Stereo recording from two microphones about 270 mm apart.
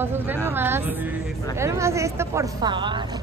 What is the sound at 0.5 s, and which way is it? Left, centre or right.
Speech, centre.